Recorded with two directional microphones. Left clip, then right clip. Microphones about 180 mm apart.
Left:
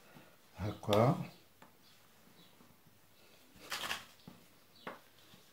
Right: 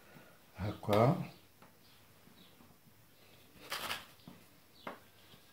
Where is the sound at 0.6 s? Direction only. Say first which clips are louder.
Right 1 dB; 5° left (ahead or behind).